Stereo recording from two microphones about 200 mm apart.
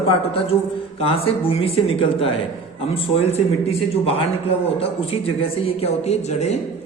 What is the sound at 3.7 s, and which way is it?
Speech, 30° left (ahead or behind).